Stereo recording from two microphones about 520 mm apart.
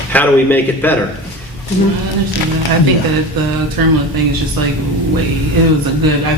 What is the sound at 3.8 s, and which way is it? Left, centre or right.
Speech, right.